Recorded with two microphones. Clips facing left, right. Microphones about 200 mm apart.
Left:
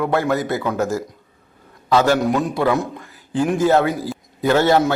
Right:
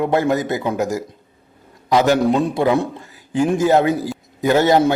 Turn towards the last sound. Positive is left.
turn(degrees=-15)  # may be behind; listen again after turning